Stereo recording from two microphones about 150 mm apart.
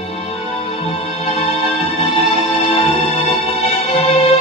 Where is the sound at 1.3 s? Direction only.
45° left (ahead or behind).